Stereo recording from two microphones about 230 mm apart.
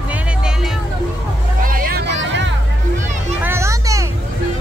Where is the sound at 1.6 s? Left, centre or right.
Right.